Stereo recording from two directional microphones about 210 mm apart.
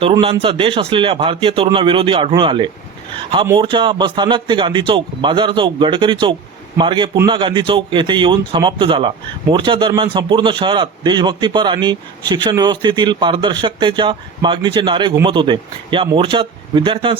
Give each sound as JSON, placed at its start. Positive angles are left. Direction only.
{"t": 0.0, "sound": "speech", "side_deg": -25}